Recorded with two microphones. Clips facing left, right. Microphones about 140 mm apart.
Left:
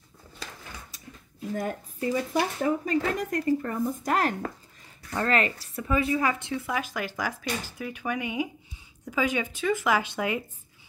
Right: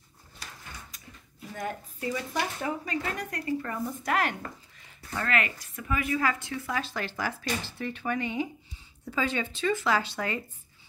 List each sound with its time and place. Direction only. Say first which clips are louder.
1.5 s speech: left 4 dB; 40° left (ahead or behind)
6.1 s speech: left 2 dB; 20° left (ahead or behind)